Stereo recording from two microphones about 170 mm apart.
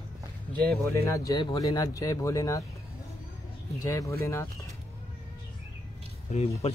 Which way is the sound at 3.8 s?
20° left (ahead or behind).